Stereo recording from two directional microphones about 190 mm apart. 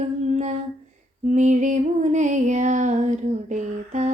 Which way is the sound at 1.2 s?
40° right (ahead or behind).